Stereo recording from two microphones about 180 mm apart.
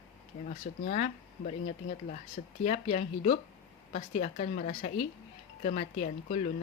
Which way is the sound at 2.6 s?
40° left (ahead or behind).